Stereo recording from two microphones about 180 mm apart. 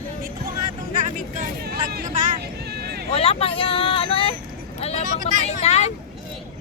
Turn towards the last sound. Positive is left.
turn(degrees=35)  # may be behind; listen again after turning